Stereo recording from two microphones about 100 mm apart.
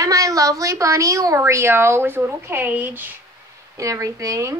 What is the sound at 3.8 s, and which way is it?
Speech, 30° right (ahead or behind).